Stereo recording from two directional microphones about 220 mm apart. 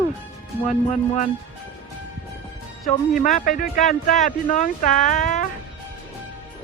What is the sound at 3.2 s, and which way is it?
Speech, 35° left (ahead or behind).